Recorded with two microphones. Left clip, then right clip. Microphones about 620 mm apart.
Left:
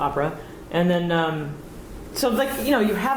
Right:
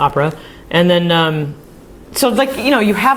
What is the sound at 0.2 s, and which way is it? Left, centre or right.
Speech, right.